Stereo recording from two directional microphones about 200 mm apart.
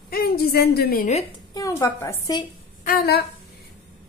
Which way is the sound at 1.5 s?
15° left (ahead or behind).